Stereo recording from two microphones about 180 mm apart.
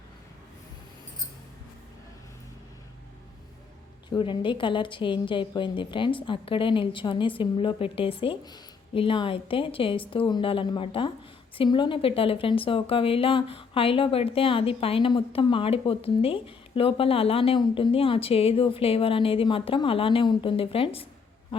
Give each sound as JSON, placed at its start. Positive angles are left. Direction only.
{"t": 4.1, "sound": "a woman's voice", "side_deg": 25}